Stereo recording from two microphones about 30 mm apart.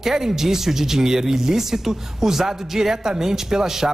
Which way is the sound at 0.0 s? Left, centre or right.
Centre.